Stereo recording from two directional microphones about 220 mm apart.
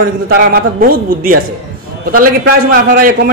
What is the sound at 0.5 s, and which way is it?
Speech, 40° right (ahead or behind).